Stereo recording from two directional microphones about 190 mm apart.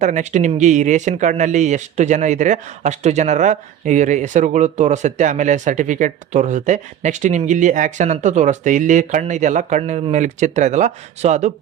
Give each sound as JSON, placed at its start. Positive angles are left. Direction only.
{"t": 0.0, "sound": "speech", "side_deg": -40}